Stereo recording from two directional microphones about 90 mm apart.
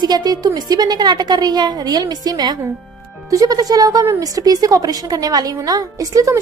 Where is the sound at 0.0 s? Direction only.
50° right (ahead or behind).